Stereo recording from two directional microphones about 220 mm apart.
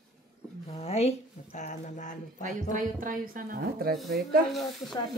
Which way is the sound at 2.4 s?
35° right (ahead or behind).